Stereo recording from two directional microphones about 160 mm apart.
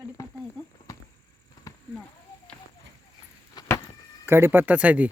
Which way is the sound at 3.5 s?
25° left (ahead or behind).